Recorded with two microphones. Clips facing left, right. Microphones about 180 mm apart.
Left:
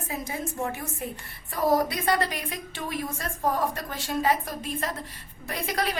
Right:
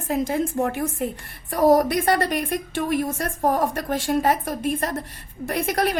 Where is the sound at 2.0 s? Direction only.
60° right (ahead or behind).